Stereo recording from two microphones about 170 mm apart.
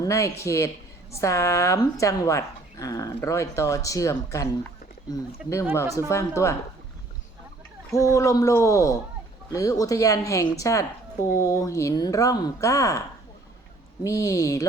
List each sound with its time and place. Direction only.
0.0 s a woman's voice: 20° left (ahead or behind)
6.1 s speech: 15° left (ahead or behind)
7.9 s a woman's voice: 20° left (ahead or behind)
14.0 s a woman's voice: 20° left (ahead or behind)